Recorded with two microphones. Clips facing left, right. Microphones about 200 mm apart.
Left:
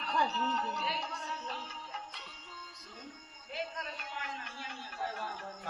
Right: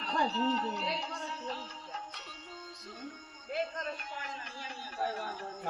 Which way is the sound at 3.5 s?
50° right (ahead or behind).